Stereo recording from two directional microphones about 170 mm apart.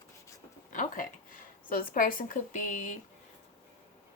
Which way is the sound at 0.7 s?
50° left (ahead or behind).